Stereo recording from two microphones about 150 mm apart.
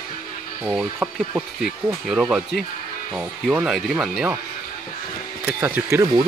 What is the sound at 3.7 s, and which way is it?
Speech, centre (ahead or behind).